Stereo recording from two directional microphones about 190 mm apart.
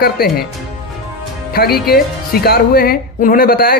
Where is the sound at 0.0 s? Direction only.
55° left (ahead or behind).